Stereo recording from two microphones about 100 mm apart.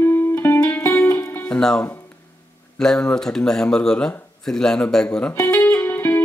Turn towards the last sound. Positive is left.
turn(degrees=20)  # may be behind; listen again after turning